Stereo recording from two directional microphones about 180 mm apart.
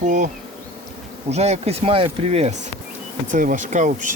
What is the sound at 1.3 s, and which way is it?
Speech, 35° right (ahead or behind).